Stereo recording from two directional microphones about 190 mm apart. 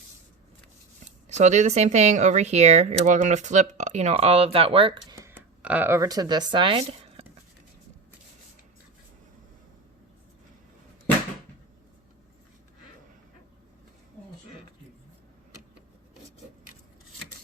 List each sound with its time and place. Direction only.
1.3 s speech: 40° right (ahead or behind)
5.1 s speech: 15° right (ahead or behind); by 7.3 s 30° right (ahead or behind)